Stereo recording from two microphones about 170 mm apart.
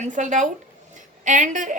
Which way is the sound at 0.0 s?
45° right (ahead or behind).